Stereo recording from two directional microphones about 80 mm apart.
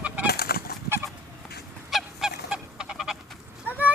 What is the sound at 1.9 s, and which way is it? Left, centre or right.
Goose, centre.